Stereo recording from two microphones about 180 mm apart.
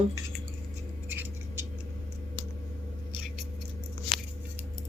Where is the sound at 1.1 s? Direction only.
10° right (ahead or behind).